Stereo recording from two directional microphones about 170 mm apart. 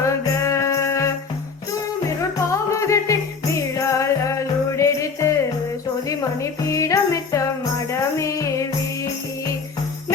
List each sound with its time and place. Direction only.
0.0 s music: 15° left (ahead or behind)
2.5 s music: 20° left (ahead or behind)